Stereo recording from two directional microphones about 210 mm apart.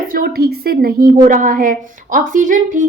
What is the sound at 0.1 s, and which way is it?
A woman's voice, 45° right (ahead or behind).